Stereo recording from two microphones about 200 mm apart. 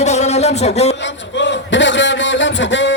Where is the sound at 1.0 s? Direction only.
65° left (ahead or behind).